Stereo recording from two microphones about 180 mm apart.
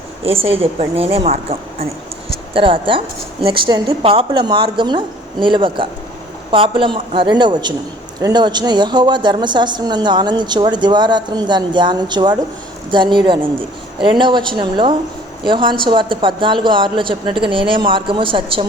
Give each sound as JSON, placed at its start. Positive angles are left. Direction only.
{"t": 0.3, "sound": "a woman's voice", "side_deg": -30}